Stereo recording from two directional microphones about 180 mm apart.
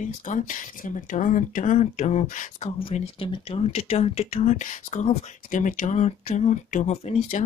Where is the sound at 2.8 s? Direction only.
30° left (ahead or behind).